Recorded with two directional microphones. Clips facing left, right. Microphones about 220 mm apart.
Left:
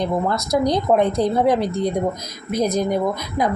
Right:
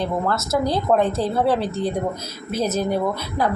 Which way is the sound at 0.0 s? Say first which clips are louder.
Left 2 dB; 15° left (ahead or behind).